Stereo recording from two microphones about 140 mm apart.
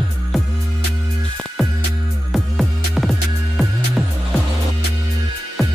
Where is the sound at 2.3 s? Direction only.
Centre (ahead or behind).